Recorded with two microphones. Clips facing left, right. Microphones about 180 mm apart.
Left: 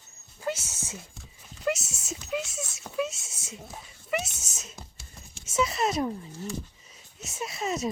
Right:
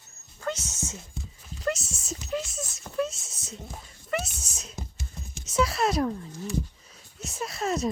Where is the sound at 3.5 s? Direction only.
5° left (ahead or behind).